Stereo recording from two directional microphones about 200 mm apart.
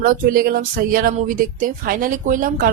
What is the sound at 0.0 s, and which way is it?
A woman's voice, 45° right (ahead or behind).